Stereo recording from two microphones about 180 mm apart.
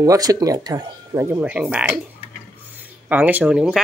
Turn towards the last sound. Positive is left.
turn(degrees=-5)  # may be behind; listen again after turning